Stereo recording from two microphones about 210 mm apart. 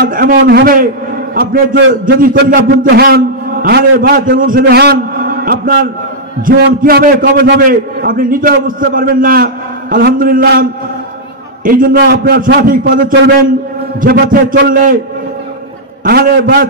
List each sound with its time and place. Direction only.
0.0 s a man's voice: 45° right (ahead or behind)
16.0 s a man's voice: 45° right (ahead or behind)